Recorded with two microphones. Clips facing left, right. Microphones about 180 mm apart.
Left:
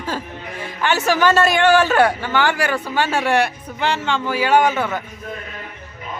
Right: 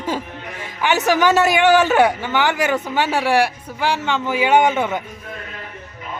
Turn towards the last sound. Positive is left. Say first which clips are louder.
# right 1 dB
turn(degrees=-20)  # may be behind; listen again after turning